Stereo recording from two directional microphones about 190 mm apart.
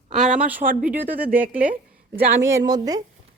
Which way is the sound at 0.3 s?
10° right (ahead or behind).